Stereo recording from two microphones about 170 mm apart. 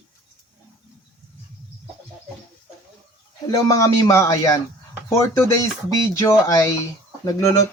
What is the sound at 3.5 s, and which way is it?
Speech, 20° left (ahead or behind).